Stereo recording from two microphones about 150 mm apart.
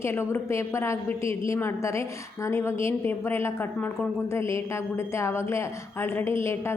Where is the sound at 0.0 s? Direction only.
15° left (ahead or behind).